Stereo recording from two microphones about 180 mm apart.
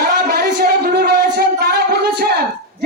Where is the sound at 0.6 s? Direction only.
60° right (ahead or behind).